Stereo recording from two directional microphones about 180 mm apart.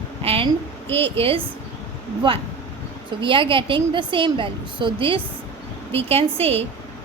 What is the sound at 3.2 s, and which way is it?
A woman's voice, 25° right (ahead or behind).